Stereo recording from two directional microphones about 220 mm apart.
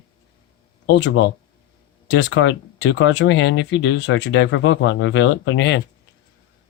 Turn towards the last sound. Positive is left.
turn(degrees=55)  # may be behind; listen again after turning